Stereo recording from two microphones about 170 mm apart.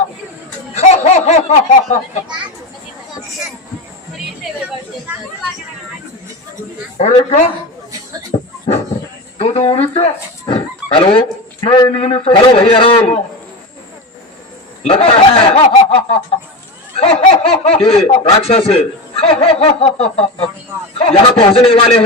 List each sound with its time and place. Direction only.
0.7 s snicker: 40° left (ahead or behind)
7.0 s speech: 40° left (ahead or behind)
8.3 s dog: 25° left (ahead or behind)
9.4 s speech: 35° left (ahead or behind)
9.9 s dog: 35° left (ahead or behind)
11.9 s speech: 35° left (ahead or behind)
14.8 s speech: 35° left (ahead or behind)